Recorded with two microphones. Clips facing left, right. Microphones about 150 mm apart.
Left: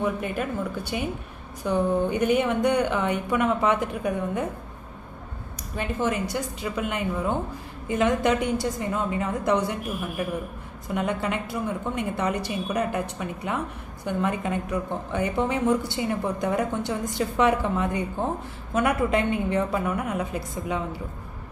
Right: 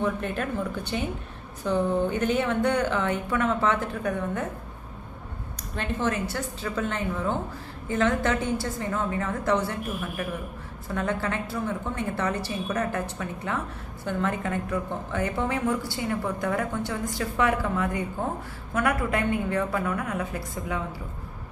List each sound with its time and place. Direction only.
0.0 s a woman's voice: 10° left (ahead or behind)
5.8 s a woman's voice: 10° left (ahead or behind)